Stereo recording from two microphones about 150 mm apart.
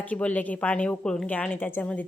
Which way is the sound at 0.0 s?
10° left (ahead or behind).